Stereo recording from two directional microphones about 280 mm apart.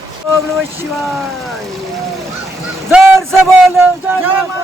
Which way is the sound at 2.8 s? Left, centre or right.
Centre.